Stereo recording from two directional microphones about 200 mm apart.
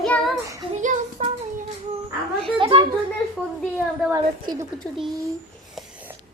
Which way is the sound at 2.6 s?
25° right (ahead or behind).